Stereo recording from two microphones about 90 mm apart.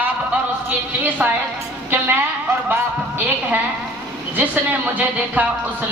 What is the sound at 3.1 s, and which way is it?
Speech, 20° right (ahead or behind).